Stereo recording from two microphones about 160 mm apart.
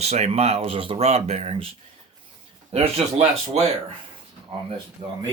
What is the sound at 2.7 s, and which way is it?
Speech, 40° right (ahead or behind).